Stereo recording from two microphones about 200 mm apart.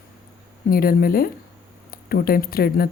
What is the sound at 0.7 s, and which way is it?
Speech, 45° left (ahead or behind).